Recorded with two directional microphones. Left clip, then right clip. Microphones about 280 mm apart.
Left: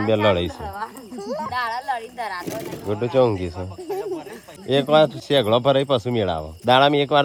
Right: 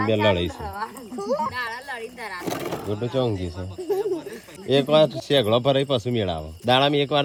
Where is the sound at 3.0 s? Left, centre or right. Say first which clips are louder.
Left 8 dB; centre.